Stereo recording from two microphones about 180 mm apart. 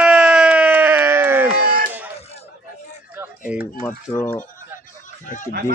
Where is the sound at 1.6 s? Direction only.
50° right (ahead or behind).